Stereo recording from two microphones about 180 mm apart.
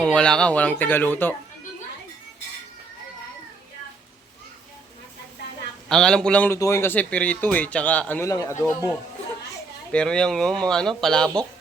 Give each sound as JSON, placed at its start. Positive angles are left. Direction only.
{"t": 0.0, "sound": "a man's voice", "side_deg": 5}
{"t": 5.9, "sound": "a man's voice", "side_deg": 5}
{"t": 9.9, "sound": "speech", "side_deg": 5}